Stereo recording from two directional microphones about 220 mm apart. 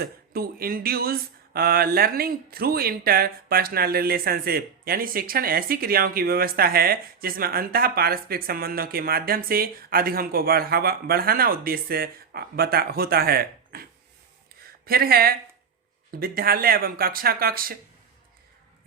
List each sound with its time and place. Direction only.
0.0 s speech: 45° right (ahead or behind)
14.8 s speech: 45° right (ahead or behind)